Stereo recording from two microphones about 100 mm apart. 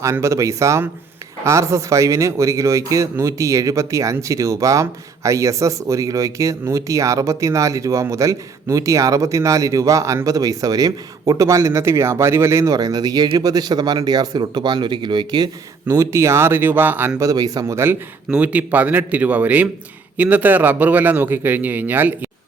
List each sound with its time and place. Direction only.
0.0 s a man's voice: 30° right (ahead or behind); by 15.4 s 45° right (ahead or behind)
15.9 s speech: 30° right (ahead or behind)
17.2 s a man's voice: 35° right (ahead or behind)
17.7 s a man's voice: 20° right (ahead or behind)